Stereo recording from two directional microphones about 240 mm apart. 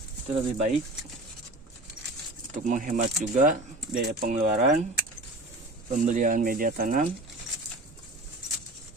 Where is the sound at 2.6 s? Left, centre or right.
Right.